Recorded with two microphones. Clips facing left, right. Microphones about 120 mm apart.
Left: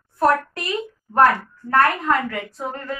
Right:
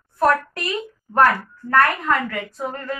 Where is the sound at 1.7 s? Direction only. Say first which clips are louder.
Even; 20° left (ahead or behind).